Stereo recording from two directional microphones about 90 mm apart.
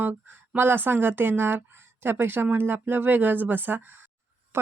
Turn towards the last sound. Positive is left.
turn(degrees=-20)  # may be behind; listen again after turning